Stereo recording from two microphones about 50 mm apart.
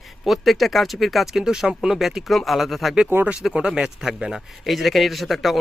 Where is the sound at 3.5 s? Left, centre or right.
Centre.